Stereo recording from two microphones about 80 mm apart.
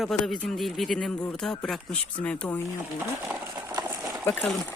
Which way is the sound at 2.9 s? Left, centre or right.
Right.